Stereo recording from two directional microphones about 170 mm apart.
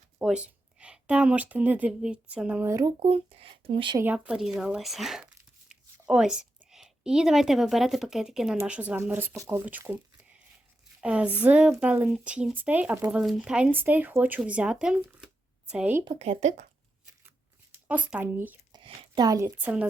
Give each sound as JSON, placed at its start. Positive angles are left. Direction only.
{"t": 0.2, "sound": "speech", "side_deg": -5}
{"t": 3.0, "sound": "speech", "side_deg": -35}
{"t": 3.9, "sound": "speech", "side_deg": -10}
{"t": 11.0, "sound": "speech", "side_deg": -5}
{"t": 16.0, "sound": "speech", "side_deg": -35}
{"t": 17.7, "sound": "speech", "side_deg": -10}
{"t": 18.7, "sound": "speech", "side_deg": -30}